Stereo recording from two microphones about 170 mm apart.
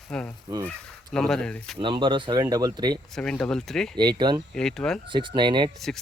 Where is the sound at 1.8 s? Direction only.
30° right (ahead or behind).